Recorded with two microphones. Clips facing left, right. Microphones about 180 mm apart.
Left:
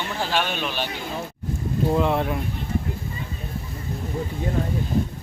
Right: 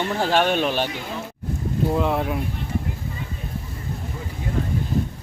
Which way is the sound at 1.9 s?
Centre (ahead or behind).